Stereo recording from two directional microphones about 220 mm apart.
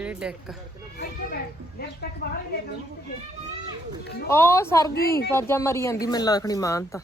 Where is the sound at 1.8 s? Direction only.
45° left (ahead or behind).